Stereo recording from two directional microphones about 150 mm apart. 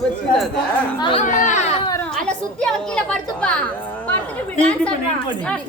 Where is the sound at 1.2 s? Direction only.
55° left (ahead or behind).